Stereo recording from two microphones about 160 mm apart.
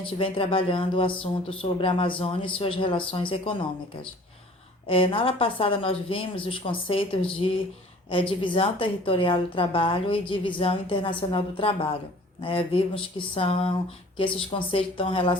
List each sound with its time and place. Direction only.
0.0 s a woman's voice: 35° left (ahead or behind)
4.9 s a woman's voice: 35° left (ahead or behind)